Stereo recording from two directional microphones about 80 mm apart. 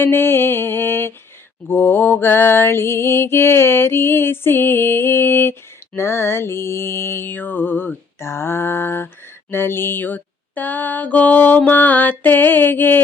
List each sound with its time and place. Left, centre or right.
0.0 s mantra: left